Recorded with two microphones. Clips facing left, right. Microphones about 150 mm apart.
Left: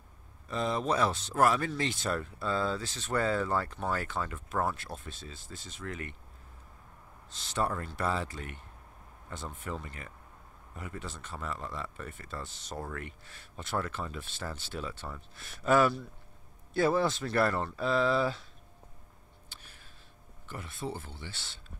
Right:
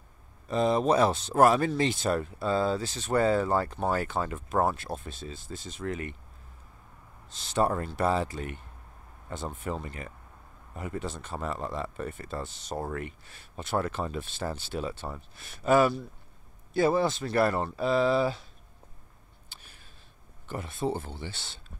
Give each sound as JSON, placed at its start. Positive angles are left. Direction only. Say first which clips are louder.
{"t": 0.5, "sound": "speech", "louder": "right 6 dB", "side_deg": -20}
{"t": 7.6, "sound": "speech", "louder": "right 6 dB", "side_deg": -25}
{"t": 9.7, "sound": "speech", "louder": "right 4 dB", "side_deg": -25}
{"t": 15.3, "sound": "speech", "louder": "right 3 dB", "side_deg": -5}
{"t": 20.4, "sound": "speech", "louder": "right 7 dB", "side_deg": -25}